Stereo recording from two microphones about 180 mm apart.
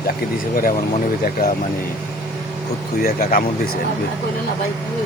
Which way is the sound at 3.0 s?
50° left (ahead or behind).